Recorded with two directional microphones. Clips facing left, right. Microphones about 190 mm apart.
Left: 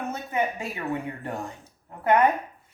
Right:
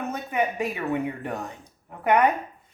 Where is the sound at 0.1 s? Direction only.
15° right (ahead or behind).